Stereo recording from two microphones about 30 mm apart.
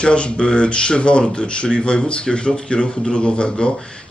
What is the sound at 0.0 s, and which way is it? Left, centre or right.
A man's voice, left.